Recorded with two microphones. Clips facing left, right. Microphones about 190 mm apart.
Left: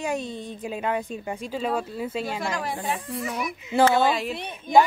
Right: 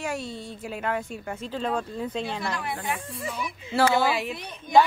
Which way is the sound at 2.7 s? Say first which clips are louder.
Left 3 dB; 25° left (ahead or behind).